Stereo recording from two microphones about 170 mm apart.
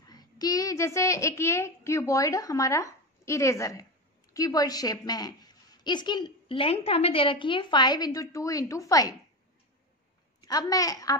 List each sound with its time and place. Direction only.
0.1 s a child's voice: 20° left (ahead or behind)
10.4 s a woman's voice: 20° left (ahead or behind)